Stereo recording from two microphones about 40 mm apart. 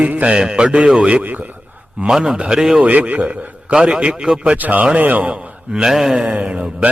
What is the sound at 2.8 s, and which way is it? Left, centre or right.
Speech, right.